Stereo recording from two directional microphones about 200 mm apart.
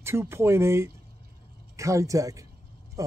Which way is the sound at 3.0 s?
15° right (ahead or behind).